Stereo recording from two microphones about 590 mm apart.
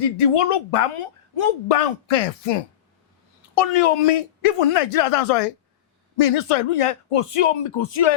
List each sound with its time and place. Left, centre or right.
0.2 s a woman's voice: left
3.5 s a woman's voice: left